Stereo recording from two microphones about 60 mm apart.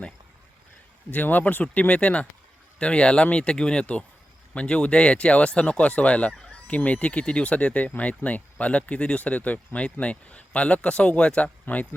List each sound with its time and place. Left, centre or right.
1.1 s speech: left
11.6 s speech: left